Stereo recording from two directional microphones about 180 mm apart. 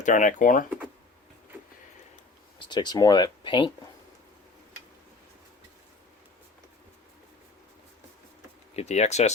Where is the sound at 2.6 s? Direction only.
25° left (ahead or behind).